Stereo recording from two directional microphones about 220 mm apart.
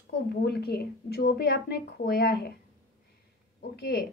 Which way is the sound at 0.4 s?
45° left (ahead or behind).